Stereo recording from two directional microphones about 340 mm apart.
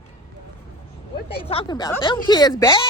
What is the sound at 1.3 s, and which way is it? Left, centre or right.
Speech, centre.